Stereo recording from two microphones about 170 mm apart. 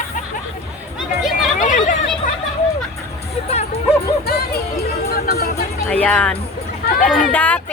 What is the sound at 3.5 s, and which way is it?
Music, 40° left (ahead or behind).